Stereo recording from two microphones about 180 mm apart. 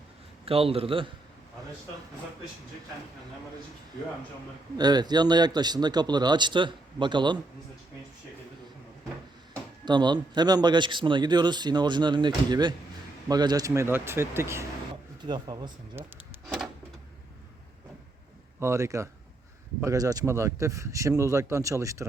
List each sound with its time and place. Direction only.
0.4 s a man's voice: 30° right (ahead or behind)
4.8 s a man's voice: 20° right (ahead or behind)
9.8 s a man's voice: 25° right (ahead or behind)
15.2 s a man's voice: 25° right (ahead or behind)
16.0 s a man's voice: 10° right (ahead or behind)
18.6 s a man's voice: 15° right (ahead or behind)